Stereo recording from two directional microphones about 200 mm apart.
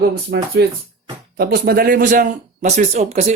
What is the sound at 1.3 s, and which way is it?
Speech, 50° right (ahead or behind).